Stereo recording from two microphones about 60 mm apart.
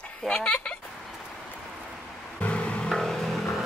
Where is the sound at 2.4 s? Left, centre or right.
Left.